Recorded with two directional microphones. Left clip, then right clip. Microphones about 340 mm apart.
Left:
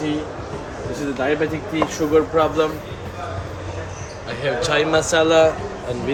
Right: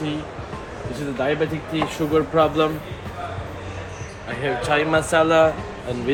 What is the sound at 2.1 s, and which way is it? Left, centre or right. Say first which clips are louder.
Speech: left 1 dB; right.